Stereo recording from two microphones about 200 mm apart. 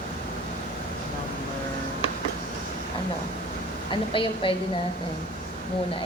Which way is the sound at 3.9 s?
25° left (ahead or behind).